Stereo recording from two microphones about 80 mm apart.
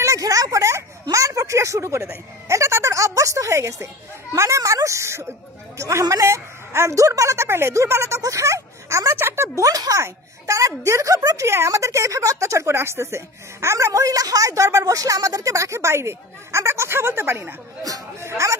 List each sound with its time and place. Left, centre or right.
0.0 s a sound: right
4.4 s speech: right
9.6 s speech: right